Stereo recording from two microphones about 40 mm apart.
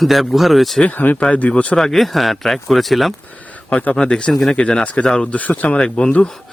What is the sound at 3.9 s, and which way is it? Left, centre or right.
Speech, left.